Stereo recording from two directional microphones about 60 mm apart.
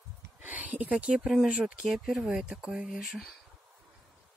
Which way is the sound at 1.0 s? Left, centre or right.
Centre.